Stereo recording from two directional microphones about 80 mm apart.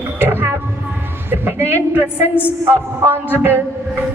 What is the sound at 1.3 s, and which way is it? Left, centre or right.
Music, right.